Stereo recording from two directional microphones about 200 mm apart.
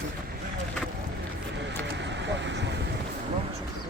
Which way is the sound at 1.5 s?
60° right (ahead or behind).